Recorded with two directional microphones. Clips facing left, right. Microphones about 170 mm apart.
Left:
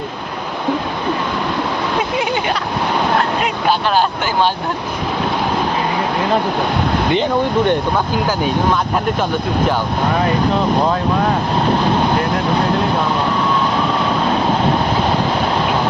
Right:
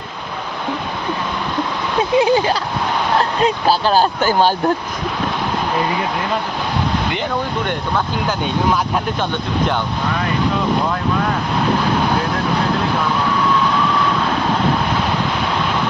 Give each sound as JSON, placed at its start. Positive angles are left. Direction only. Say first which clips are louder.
{"t": 2.1, "sound": "speech", "louder": "right 5 dB", "side_deg": -30}